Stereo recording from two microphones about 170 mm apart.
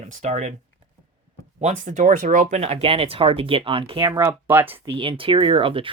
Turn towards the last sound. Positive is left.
turn(degrees=-30)  # may be behind; listen again after turning